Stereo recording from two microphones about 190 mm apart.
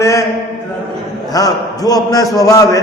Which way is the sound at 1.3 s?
20° left (ahead or behind).